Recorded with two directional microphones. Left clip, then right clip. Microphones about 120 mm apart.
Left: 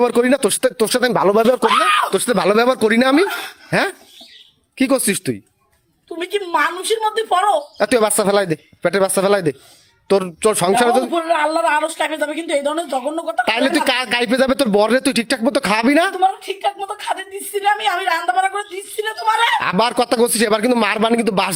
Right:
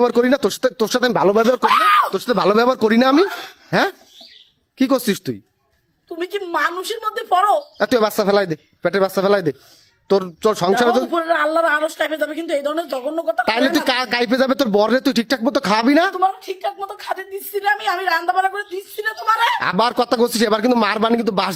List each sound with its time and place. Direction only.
0.0 s speech: 10° right (ahead or behind)
1.4 s speech: 15° left (ahead or behind)
1.6 s speech: 55° right (ahead or behind)
2.1 s speech: 5° left (ahead or behind)
4.8 s speech: 10° right (ahead or behind)
6.1 s a woman's voice: 40° right (ahead or behind)
7.8 s speech: 10° right (ahead or behind)
8.1 s speech: centre (ahead or behind)
11.1 s a woman's voice: 35° right (ahead or behind)
13.4 s speech: 15° right (ahead or behind)
16.1 s a woman's voice: 35° right (ahead or behind)
19.5 s speech: 15° right (ahead or behind)